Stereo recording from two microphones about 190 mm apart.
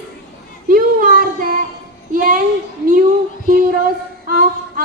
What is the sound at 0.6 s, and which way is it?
Speech, 45° right (ahead or behind).